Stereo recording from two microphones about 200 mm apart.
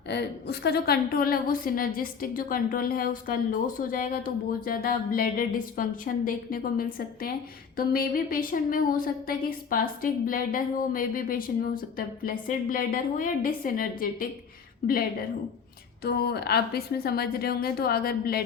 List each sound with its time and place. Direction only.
0.1 s a woman's voice: 55° left (ahead or behind)
16.0 s a woman's voice: 55° left (ahead or behind)